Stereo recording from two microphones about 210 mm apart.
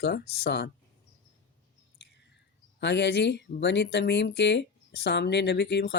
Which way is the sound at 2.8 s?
55° left (ahead or behind).